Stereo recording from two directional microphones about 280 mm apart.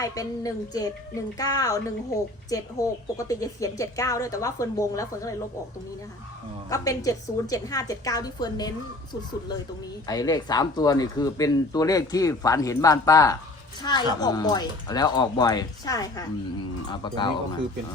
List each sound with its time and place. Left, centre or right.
0.0 s speech: centre
6.7 s speech: centre
10.1 s speech: centre